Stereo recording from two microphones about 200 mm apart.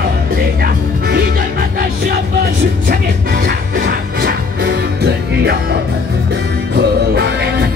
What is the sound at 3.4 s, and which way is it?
Music, 45° right (ahead or behind).